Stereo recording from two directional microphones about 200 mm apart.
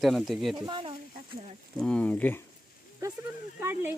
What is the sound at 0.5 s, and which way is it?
Speech, 25° right (ahead or behind).